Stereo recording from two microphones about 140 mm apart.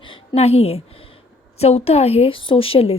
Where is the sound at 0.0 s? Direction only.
40° left (ahead or behind).